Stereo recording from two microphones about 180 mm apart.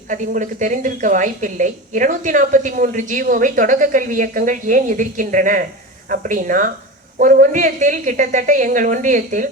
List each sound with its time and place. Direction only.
0.1 s a woman's voice: 45° right (ahead or behind)